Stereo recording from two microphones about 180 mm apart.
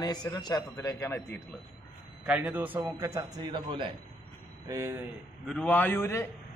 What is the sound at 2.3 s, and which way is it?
A man's voice, 10° right (ahead or behind).